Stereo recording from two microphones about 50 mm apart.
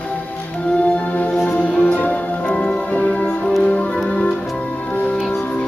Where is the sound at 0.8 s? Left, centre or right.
Left.